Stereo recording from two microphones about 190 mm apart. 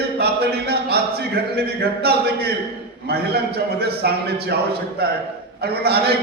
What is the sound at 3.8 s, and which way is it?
Speech, 55° right (ahead or behind).